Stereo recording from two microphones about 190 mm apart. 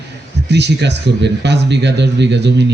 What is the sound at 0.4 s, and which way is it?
A man's voice, 65° right (ahead or behind).